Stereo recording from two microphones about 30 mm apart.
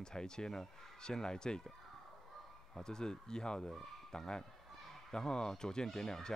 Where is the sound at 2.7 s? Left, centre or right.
Left.